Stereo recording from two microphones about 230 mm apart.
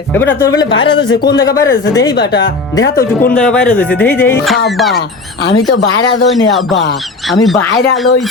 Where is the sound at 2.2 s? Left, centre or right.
Left.